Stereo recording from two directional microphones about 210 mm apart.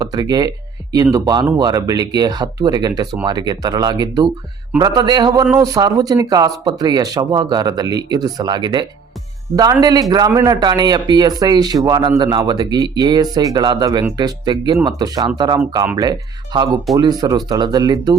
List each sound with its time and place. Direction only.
0.0 s a man's voice: 20° right (ahead or behind)